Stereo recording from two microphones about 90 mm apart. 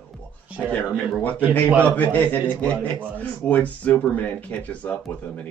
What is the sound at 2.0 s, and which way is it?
A man's voice, 20° left (ahead or behind).